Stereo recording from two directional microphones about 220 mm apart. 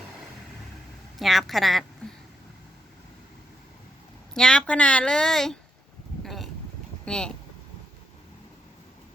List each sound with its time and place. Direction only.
1.2 s a woman's voice: centre (ahead or behind)
4.4 s a woman's voice: 5° left (ahead or behind)
6.2 s a sound: centre (ahead or behind)
7.0 s speech: 5° left (ahead or behind)